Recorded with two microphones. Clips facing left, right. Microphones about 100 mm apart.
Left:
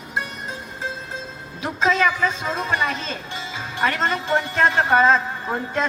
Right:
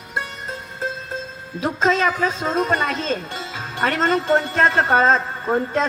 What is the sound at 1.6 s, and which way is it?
A man's voice, 40° right (ahead or behind).